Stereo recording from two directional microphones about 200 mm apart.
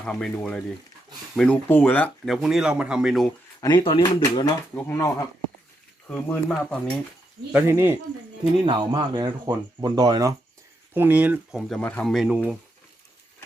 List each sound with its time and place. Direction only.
0.0 s speech: 5° left (ahead or behind)
3.6 s speech: 20° left (ahead or behind); by 6.8 s 5° left (ahead or behind)
7.5 s speech: 10° right (ahead or behind)
8.6 s speech: 25° right (ahead or behind); by 12.4 s centre (ahead or behind)